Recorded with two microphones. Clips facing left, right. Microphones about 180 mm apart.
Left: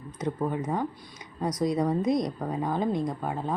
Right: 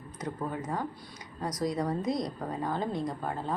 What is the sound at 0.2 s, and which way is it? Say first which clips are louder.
A woman's voice: left 6 dB; 20° left (ahead or behind).